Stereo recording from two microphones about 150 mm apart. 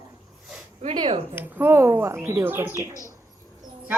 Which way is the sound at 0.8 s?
40° right (ahead or behind).